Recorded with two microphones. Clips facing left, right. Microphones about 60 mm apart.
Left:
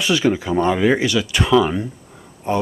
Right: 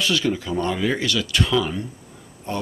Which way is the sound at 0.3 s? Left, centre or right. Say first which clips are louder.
Left 6 dB; left.